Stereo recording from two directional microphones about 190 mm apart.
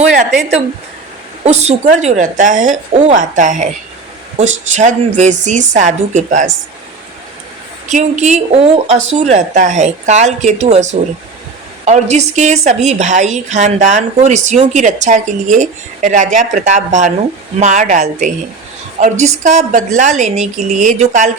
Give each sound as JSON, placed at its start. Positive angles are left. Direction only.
{"t": 0.2, "sound": "speech", "side_deg": 0}
{"t": 1.5, "sound": "speech", "side_deg": -35}
{"t": 7.9, "sound": "speech", "side_deg": -40}